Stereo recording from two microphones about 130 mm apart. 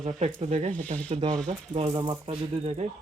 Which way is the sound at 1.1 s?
50° right (ahead or behind).